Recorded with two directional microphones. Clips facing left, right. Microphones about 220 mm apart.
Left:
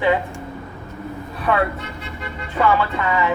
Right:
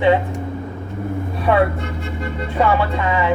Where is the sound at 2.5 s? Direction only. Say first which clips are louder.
Right 1 dB; 25° right (ahead or behind).